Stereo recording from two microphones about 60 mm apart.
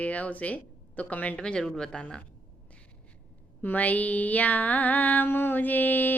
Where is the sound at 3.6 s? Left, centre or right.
Left.